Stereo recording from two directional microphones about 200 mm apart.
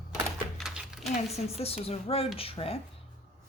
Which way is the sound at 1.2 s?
30° left (ahead or behind).